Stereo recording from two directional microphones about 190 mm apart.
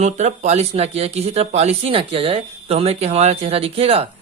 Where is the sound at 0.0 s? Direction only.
35° right (ahead or behind).